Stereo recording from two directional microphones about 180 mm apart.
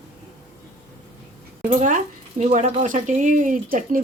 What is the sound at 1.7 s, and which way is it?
Speech, 45° right (ahead or behind).